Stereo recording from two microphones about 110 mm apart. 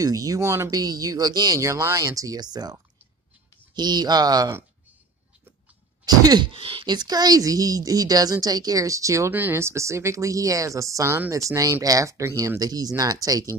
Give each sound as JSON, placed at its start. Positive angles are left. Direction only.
{"t": 0.0, "sound": "speech", "side_deg": -35}
{"t": 6.0, "sound": "speech", "side_deg": -35}
{"t": 6.5, "sound": "speech", "side_deg": -55}
{"t": 9.3, "sound": "speech", "side_deg": -20}